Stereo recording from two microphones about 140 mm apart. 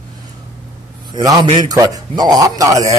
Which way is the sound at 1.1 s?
30° right (ahead or behind).